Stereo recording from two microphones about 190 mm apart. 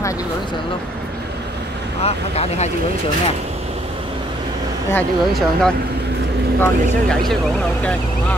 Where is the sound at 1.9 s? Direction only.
30° left (ahead or behind).